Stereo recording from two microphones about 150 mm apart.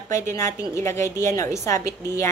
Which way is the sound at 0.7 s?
20° left (ahead or behind).